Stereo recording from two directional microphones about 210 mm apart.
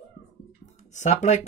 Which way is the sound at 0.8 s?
35° left (ahead or behind).